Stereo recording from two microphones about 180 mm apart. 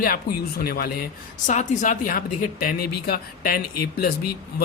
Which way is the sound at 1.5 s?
40° left (ahead or behind).